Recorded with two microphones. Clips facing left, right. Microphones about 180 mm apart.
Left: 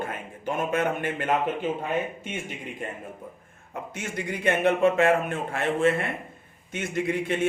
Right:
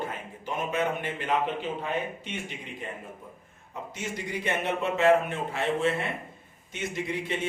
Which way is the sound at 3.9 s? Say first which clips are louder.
Left 2 dB; 55° left (ahead or behind).